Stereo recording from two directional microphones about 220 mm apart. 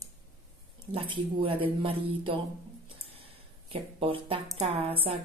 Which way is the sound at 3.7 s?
25° right (ahead or behind).